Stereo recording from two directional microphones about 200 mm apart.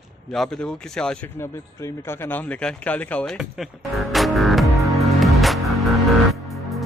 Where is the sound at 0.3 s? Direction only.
Centre (ahead or behind).